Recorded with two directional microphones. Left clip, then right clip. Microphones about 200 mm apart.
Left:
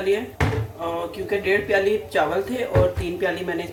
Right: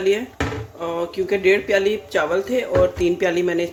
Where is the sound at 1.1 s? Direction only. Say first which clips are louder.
Right 6 dB; 45° right (ahead or behind).